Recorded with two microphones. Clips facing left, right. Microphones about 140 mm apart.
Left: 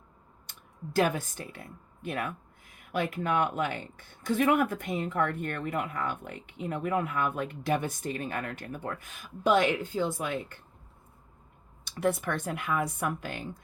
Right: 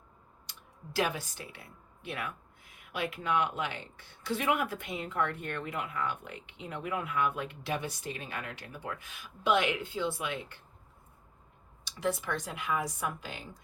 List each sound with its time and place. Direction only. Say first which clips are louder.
0.5 s a sound: even; 50° left (ahead or behind)
0.9 s speech: left 5 dB; 50° left (ahead or behind)
11.9 s speech: left 4 dB; 55° left (ahead or behind)